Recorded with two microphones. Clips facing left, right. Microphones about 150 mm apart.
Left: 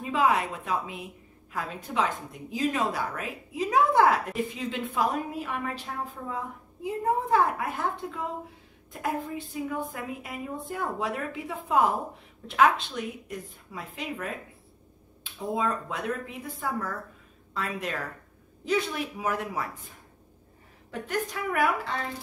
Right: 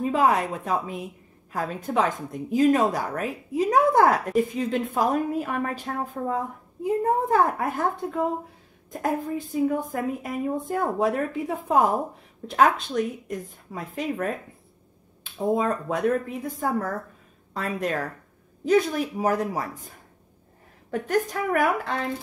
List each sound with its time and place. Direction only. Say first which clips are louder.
0.0 s a woman's voice: right 4 dB; 45° right (ahead or behind)
15.3 s a woman's voice: right 5 dB; 45° right (ahead or behind)
20.9 s a woman's voice: right 7 dB; 45° right (ahead or behind)